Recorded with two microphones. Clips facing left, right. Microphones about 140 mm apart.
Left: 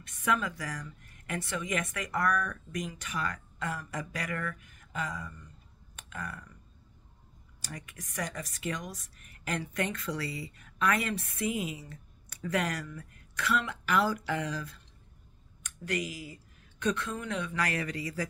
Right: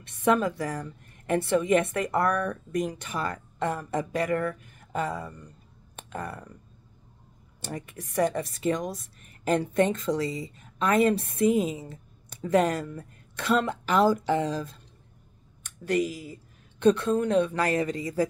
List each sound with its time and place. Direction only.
0.0 s a woman's voice: 25° right (ahead or behind)
7.6 s a woman's voice: 30° right (ahead or behind)
16.8 s a woman's voice: 30° right (ahead or behind)